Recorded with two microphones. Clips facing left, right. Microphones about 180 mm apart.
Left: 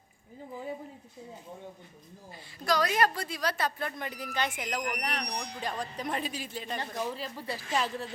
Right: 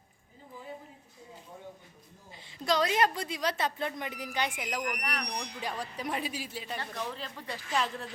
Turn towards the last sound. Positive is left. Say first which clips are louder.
# left 3 dB
turn(degrees=10)  # may be behind; listen again after turning